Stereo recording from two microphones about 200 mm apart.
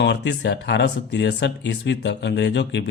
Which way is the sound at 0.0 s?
60° left (ahead or behind).